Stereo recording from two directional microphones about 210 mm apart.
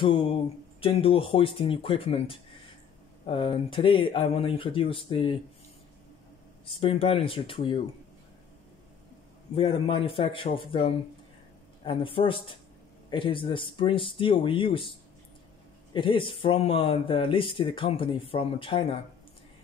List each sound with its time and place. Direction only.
0.0 s speech: 25° left (ahead or behind)
6.6 s speech: 25° left (ahead or behind)
9.6 s speech: 25° left (ahead or behind)
15.9 s speech: 25° left (ahead or behind)